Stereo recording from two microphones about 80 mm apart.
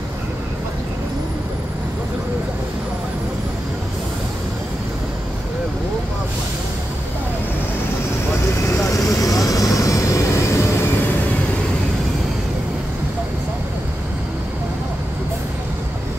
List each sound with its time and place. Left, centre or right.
8.5 s vehicle: left
9.2 s vehicle: left